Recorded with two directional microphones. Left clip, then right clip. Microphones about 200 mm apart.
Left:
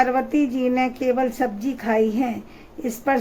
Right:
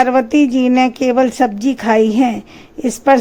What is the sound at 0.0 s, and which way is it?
Speech, 35° right (ahead or behind).